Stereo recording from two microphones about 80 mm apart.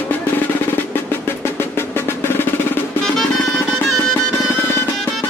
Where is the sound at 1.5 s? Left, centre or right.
Left.